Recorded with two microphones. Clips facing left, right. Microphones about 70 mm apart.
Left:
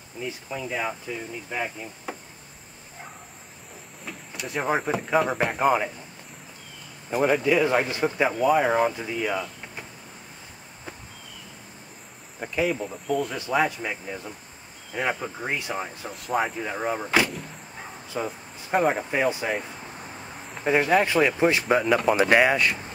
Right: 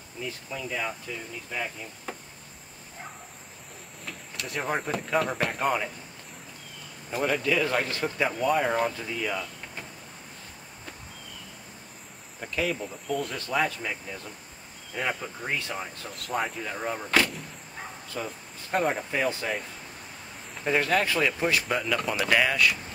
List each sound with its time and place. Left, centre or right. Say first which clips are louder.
0.2 s speech: left 3 dB; centre
4.0 s speech: left 2 dB; centre
7.1 s speech: left 5 dB; centre
12.6 s speech: left 5 dB; centre
13.4 s speech: left 4 dB; centre
16.1 s speech: left 4 dB; centre
17.3 s vehicle: left 3 dB; centre
18.1 s speech: left 6 dB; centre